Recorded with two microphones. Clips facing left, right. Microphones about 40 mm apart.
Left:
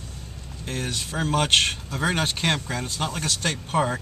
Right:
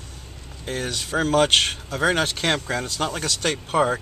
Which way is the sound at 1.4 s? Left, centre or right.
Right.